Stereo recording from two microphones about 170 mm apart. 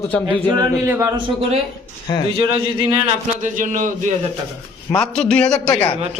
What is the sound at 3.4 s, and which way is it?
Speech, 50° right (ahead or behind).